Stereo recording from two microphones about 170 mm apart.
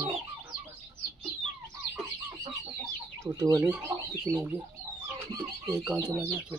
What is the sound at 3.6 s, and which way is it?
Speech, 10° right (ahead or behind).